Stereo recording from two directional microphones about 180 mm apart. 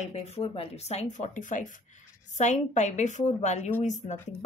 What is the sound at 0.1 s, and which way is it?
A woman's voice, 35° left (ahead or behind).